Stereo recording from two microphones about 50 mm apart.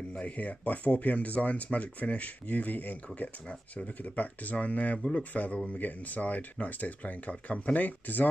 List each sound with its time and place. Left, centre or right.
0.2 s speech: left